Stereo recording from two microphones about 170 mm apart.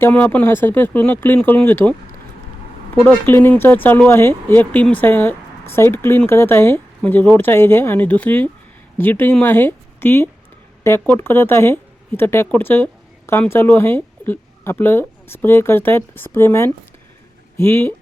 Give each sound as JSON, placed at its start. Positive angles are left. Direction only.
{"t": 0.0, "sound": "speech", "side_deg": 10}
{"t": 3.0, "sound": "speech", "side_deg": 10}